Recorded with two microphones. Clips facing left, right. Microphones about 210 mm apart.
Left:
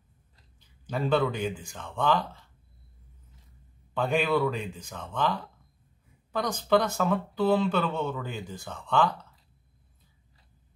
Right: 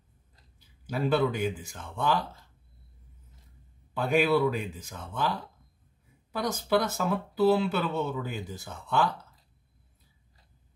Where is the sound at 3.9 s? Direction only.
5° right (ahead or behind).